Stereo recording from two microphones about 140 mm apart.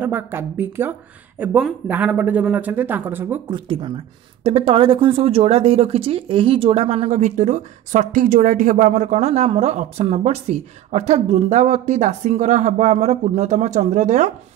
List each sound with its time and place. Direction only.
0.0 s speech: 15° right (ahead or behind)
3.4 s speech: 35° right (ahead or behind); by 14.3 s 60° right (ahead or behind)